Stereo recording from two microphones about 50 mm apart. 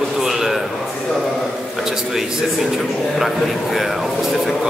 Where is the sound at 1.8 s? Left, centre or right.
Centre.